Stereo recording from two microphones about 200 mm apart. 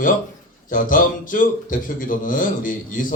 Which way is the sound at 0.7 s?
40° left (ahead or behind).